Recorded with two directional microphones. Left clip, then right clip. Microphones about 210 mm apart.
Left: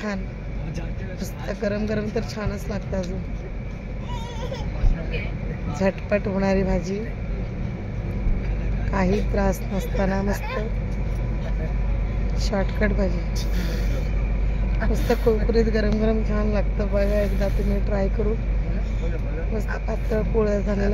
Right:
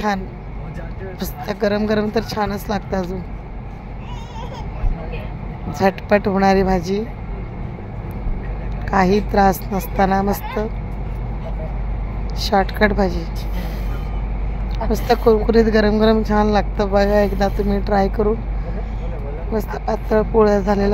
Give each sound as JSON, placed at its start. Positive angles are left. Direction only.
{"t": 1.2, "sound": "a woman's voice", "side_deg": -40}
{"t": 5.8, "sound": "a woman's voice", "side_deg": -40}
{"t": 8.9, "sound": "a woman's voice", "side_deg": -40}
{"t": 12.4, "sound": "a woman's voice", "side_deg": -40}
{"t": 14.9, "sound": "speech", "side_deg": -45}
{"t": 19.5, "sound": "a woman's voice", "side_deg": -40}